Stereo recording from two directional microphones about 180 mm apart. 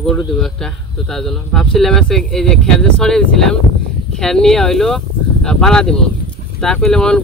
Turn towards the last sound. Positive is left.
turn(degrees=5)  # may be behind; listen again after turning